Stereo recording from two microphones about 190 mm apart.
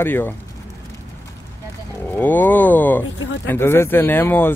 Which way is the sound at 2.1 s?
10° left (ahead or behind).